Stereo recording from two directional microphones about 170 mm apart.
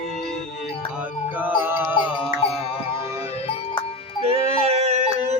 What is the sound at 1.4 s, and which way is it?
Music, 10° right (ahead or behind).